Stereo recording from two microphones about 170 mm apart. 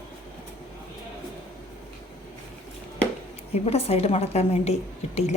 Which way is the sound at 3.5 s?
35° left (ahead or behind).